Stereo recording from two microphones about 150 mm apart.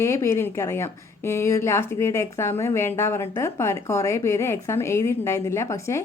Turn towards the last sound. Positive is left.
turn(degrees=20)  # may be behind; listen again after turning